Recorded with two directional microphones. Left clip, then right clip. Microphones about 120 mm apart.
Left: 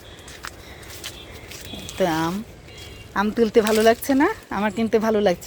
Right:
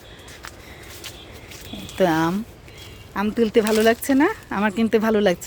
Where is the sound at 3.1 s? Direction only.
25° right (ahead or behind); by 5.3 s 65° right (ahead or behind).